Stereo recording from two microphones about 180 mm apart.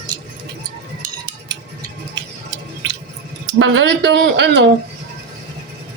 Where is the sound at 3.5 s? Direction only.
90° right.